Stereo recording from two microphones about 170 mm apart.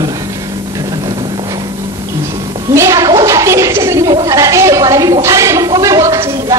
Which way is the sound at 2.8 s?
20° right (ahead or behind).